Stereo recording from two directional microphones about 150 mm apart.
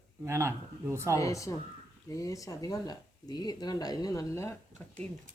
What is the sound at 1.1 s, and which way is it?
Speech, 20° left (ahead or behind).